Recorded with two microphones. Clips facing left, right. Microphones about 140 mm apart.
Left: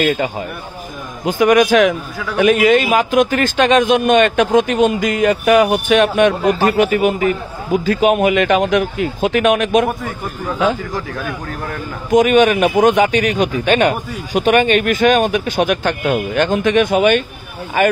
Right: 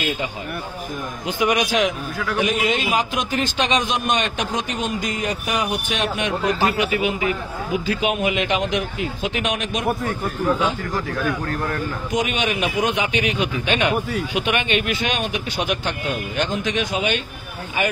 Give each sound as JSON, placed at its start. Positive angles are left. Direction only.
{"t": 0.0, "sound": "a man's voice", "side_deg": 55}
{"t": 5.0, "sound": "speech", "side_deg": 90}
{"t": 11.1, "sound": "speech", "side_deg": 0}
{"t": 12.1, "sound": "speech", "side_deg": 50}